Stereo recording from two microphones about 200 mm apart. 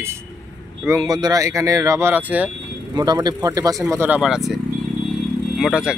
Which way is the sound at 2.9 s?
20° right (ahead or behind).